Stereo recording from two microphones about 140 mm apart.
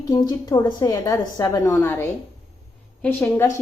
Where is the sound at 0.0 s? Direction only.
30° left (ahead or behind).